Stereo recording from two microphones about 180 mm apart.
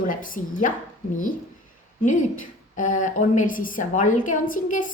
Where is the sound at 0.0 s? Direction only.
50° left (ahead or behind).